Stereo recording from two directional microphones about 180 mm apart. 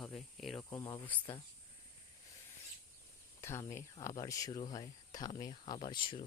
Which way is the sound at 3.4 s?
15° left (ahead or behind).